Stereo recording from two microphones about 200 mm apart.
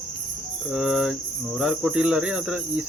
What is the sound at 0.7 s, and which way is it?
Cricket, centre (ahead or behind).